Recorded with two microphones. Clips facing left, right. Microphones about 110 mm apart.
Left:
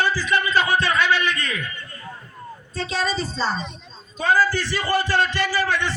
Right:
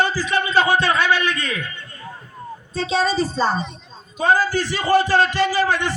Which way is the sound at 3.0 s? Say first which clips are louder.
Right 4 dB; 40° right (ahead or behind).